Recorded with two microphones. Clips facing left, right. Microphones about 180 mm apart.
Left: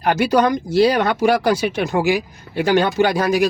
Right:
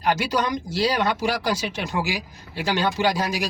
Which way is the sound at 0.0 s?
55° left (ahead or behind).